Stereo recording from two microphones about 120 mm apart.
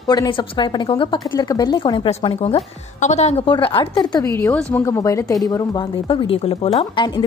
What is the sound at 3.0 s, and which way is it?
Speech, 70° left (ahead or behind).